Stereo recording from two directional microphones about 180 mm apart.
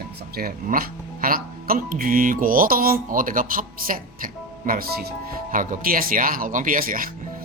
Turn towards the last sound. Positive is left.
turn(degrees=-50)  # may be behind; listen again after turning